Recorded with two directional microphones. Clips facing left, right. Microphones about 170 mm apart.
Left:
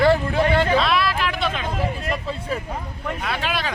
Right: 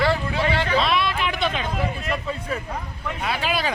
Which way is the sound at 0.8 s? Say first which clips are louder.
Left 1 dB; centre (ahead or behind).